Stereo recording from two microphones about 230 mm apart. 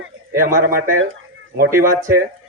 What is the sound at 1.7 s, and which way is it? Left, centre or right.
Speech, centre.